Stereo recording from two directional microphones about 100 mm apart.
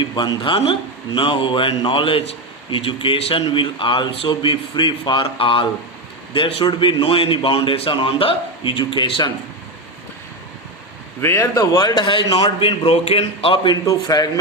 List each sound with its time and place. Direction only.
0.0 s a man's voice: 50° left (ahead or behind)
0.6 s a man's voice: 60° left (ahead or behind)
11.2 s a man's voice: 25° left (ahead or behind); by 12.5 s 50° left (ahead or behind)
12.5 s a man's voice: 65° left (ahead or behind)
13.8 s a man's voice: 35° left (ahead or behind)